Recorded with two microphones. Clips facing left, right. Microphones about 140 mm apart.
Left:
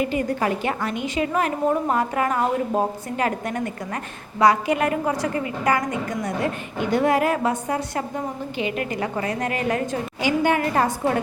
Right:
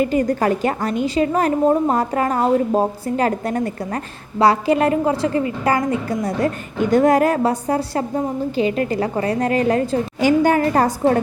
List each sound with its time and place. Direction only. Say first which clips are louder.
0.0 s a woman's voice: right 5 dB; 40° right (ahead or behind)
10.2 s a woman's voice: right 5 dB; 45° right (ahead or behind)